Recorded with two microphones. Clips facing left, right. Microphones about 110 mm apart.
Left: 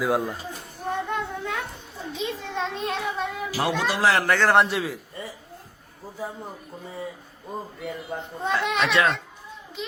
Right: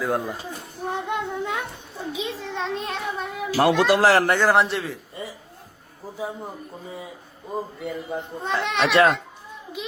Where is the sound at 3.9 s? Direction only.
35° right (ahead or behind).